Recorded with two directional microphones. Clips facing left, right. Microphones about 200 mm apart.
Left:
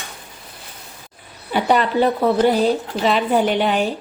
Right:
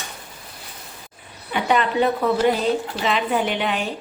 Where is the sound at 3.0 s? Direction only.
40° left (ahead or behind).